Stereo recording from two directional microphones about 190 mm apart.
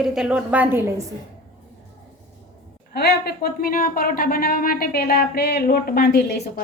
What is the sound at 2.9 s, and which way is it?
Speech, 55° left (ahead or behind).